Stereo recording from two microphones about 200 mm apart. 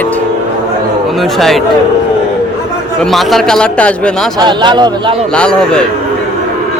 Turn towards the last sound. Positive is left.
turn(degrees=5)  # may be behind; listen again after turning